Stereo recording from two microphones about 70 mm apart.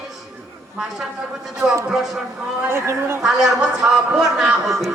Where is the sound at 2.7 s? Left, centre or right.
Right.